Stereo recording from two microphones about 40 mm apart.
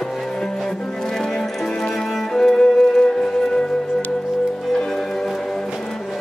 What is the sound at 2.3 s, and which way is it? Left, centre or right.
Music, centre.